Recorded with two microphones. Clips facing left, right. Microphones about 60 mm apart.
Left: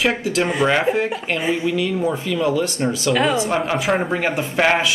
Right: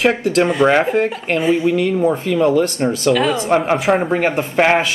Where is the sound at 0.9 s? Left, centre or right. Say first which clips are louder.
Right 4 dB; right.